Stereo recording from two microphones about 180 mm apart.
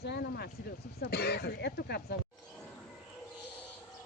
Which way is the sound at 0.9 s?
60° left (ahead or behind).